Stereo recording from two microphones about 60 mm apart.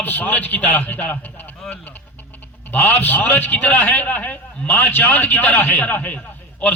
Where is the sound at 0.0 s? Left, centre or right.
Left.